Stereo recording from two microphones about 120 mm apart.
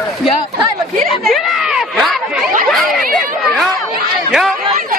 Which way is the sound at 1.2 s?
Centre (ahead or behind).